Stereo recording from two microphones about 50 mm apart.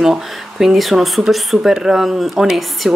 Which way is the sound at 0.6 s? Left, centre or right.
Centre.